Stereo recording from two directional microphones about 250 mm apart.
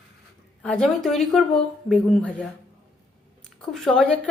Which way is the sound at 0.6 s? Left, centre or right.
Centre.